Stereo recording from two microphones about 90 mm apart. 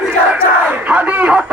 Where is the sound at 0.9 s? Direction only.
15° right (ahead or behind).